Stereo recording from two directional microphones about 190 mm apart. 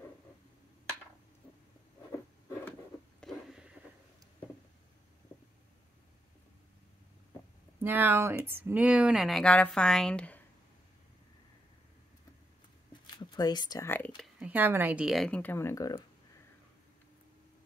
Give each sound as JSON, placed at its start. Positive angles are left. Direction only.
{"t": 3.2, "sound": "a sound", "side_deg": 0}
{"t": 7.8, "sound": "speech", "side_deg": -10}
{"t": 13.0, "sound": "speech", "side_deg": 20}
{"t": 14.1, "sound": "speech", "side_deg": 0}